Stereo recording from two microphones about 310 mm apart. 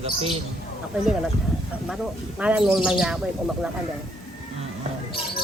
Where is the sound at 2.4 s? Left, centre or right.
Centre.